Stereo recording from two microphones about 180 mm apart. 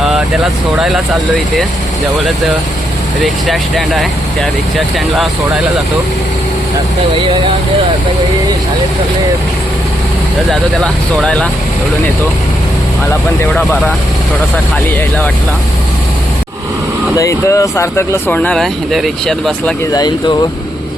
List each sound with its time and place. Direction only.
3.4 s speech: centre (ahead or behind)
10.5 s speech: centre (ahead or behind)
17.2 s speech: 20° left (ahead or behind); by 19.7 s centre (ahead or behind)
19.9 s speech: 20° left (ahead or behind)